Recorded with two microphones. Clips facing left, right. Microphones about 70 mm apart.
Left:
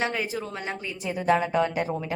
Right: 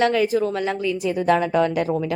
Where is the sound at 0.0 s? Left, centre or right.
Right.